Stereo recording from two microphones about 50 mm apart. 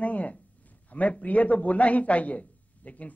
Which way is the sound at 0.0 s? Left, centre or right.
Left.